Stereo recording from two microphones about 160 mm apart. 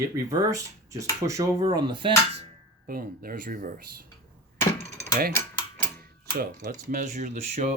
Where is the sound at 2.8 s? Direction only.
65° right (ahead or behind).